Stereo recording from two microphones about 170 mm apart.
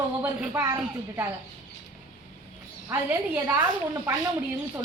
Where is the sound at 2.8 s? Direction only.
15° right (ahead or behind).